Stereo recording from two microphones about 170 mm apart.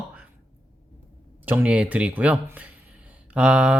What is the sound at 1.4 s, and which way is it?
Speech, 10° right (ahead or behind).